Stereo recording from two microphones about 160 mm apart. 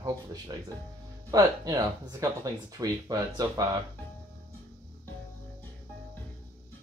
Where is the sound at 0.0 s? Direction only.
25° right (ahead or behind).